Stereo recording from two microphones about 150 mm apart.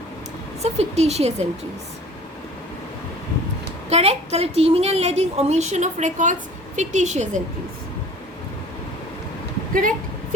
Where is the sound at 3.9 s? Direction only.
45° right (ahead or behind).